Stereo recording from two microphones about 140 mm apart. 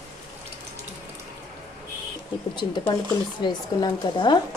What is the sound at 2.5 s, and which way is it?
A woman's voice, 35° left (ahead or behind).